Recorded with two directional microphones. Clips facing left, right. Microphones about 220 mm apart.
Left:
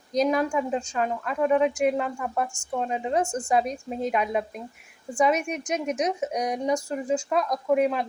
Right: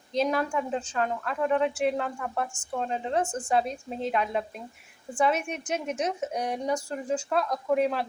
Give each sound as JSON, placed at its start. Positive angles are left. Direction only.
{"t": 0.2, "sound": "a woman's voice", "side_deg": 0}